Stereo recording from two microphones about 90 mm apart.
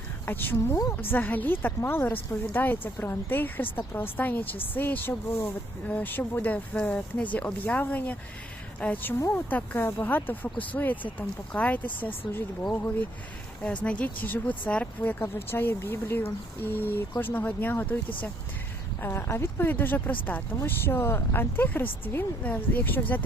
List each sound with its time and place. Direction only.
0.3 s speech: 25° left (ahead or behind)
13.8 s speech: 15° left (ahead or behind)